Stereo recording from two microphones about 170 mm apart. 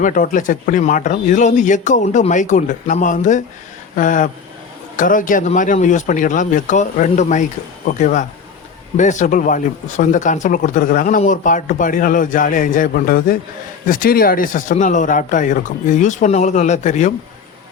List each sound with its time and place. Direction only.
0.0 s speech: 50° left (ahead or behind)